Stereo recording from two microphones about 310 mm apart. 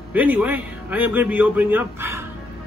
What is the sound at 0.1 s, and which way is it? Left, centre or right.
A man's voice, centre.